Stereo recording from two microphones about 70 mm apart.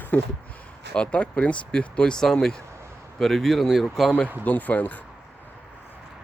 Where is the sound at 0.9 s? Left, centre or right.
Centre.